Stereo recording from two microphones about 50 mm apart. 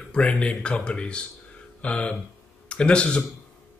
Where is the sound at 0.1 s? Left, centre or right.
Left.